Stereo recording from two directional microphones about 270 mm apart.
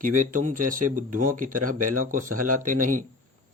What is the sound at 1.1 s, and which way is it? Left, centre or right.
Speech, right.